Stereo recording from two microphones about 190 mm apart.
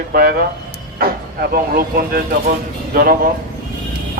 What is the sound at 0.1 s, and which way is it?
Speech, 55° right (ahead or behind).